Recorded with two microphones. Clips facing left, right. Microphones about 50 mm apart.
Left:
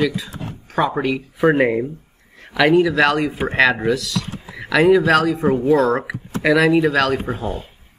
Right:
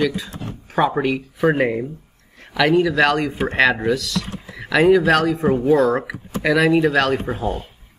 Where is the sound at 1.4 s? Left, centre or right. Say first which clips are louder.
Left 3 dB; centre.